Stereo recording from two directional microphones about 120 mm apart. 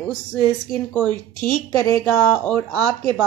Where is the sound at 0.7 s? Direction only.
10° left (ahead or behind).